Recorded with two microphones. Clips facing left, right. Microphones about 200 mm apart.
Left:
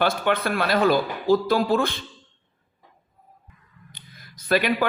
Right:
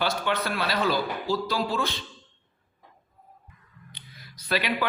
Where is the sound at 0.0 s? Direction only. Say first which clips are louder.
Left 5 dB; 55° left (ahead or behind).